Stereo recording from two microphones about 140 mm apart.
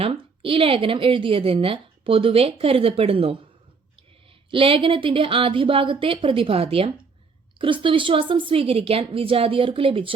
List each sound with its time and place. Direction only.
0.0 s a woman's voice: 40° right (ahead or behind)